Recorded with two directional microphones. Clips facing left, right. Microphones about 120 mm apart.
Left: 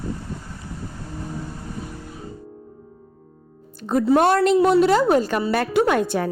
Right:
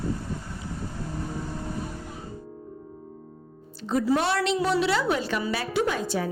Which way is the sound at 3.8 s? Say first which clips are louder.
Left 7 dB; 50° left (ahead or behind).